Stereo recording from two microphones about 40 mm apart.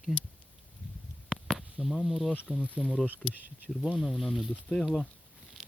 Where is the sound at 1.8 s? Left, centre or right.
Centre.